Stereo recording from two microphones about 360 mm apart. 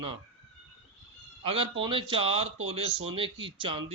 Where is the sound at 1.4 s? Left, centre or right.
Centre.